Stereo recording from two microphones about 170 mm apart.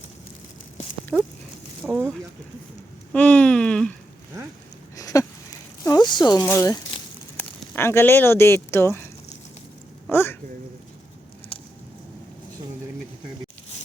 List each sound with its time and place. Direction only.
1.1 s speech: 10° right (ahead or behind)
1.8 s a sound: 10° right (ahead or behind)
3.1 s speech: 10° left (ahead or behind)
4.9 s a sound: 20° left (ahead or behind)
6.4 s speech: 15° left (ahead or behind)
10.1 s speech: 15° left (ahead or behind)